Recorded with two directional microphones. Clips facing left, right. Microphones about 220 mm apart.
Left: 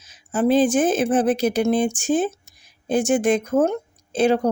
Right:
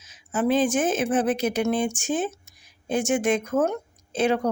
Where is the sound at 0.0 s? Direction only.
35° left (ahead or behind).